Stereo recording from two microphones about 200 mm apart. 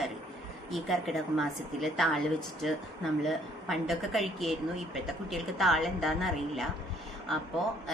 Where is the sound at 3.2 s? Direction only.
Centre (ahead or behind).